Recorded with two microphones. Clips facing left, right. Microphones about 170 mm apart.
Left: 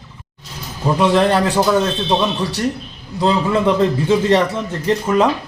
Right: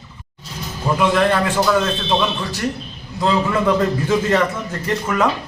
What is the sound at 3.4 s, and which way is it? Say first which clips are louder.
A man's voice: left 2 dB; 25° left (ahead or behind).